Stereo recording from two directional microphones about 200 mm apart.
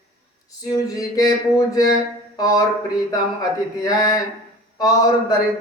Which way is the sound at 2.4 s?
20° left (ahead or behind).